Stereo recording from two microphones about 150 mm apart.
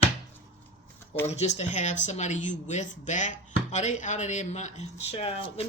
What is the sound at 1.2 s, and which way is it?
Speech, 45° left (ahead or behind).